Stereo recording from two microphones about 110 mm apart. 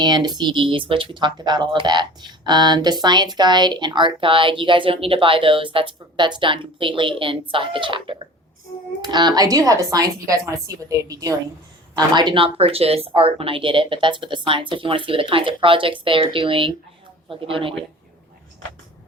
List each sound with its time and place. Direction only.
0.0 s a woman's voice: 40° right (ahead or behind)
11.9 s speech: 45° right (ahead or behind)